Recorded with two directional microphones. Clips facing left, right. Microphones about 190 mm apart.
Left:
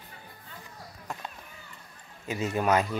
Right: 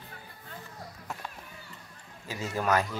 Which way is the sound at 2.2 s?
20° left (ahead or behind).